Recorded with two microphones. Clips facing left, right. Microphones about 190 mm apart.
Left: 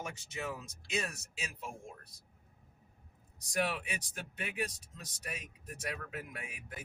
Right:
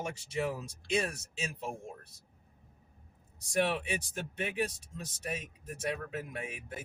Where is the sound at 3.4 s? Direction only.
30° right (ahead or behind).